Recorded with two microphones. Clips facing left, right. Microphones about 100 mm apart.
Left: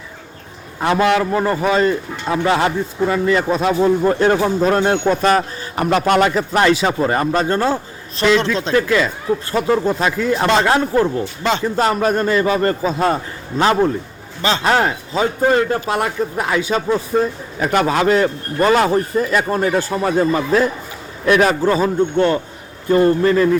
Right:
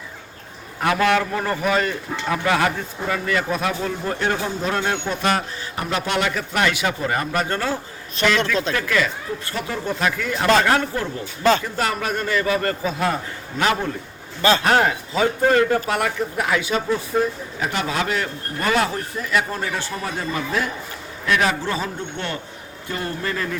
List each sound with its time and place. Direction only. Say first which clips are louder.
0.8 s a man's voice: left 4 dB; 25° left (ahead or behind)
9.5 s a man's voice: left 10 dB; 35° left (ahead or behind)
10.1 s a man's voice: even; 25° left (ahead or behind)
14.4 s a man's voice: left 1 dB; 20° left (ahead or behind)
17.6 s a man's voice: left 8 dB; 45° left (ahead or behind)
18.0 s a man's voice: left 9 dB; 35° left (ahead or behind)